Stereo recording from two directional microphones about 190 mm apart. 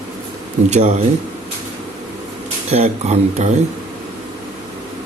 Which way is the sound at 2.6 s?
35° right (ahead or behind).